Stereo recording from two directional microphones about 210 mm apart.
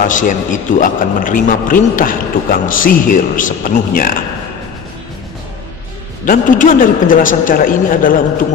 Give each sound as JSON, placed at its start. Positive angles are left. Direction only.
{"t": 0.0, "sound": "a man's voice", "side_deg": 40}
{"t": 6.2, "sound": "a man's voice", "side_deg": 40}